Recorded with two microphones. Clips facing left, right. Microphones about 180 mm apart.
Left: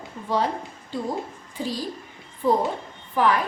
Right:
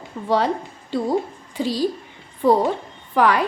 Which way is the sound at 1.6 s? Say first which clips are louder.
Right 7 dB; 75° right (ahead or behind).